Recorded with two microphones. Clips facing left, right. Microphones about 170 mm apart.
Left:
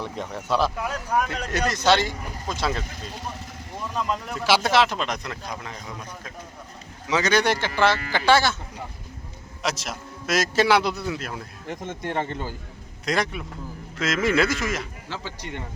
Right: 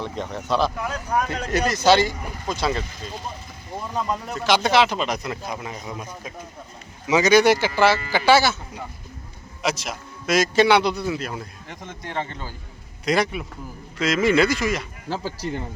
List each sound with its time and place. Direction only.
0.0 s speech: 10° left (ahead or behind)
4.4 s speech: 5° left (ahead or behind)
9.6 s speech: centre (ahead or behind)
13.1 s speech: 5° right (ahead or behind)
15.1 s speech: 35° right (ahead or behind)